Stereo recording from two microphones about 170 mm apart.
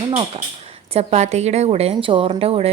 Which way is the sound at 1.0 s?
40° right (ahead or behind).